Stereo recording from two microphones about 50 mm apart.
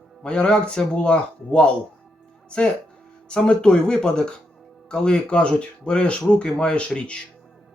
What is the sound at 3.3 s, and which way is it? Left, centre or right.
Speech, centre.